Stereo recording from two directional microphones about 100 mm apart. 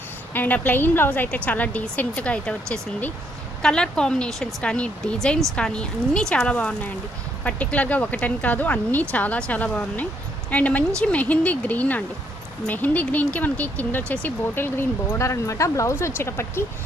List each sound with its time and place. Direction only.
0.3 s speech: 20° left (ahead or behind)